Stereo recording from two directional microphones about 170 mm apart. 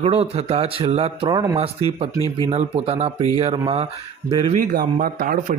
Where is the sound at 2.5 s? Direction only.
35° right (ahead or behind).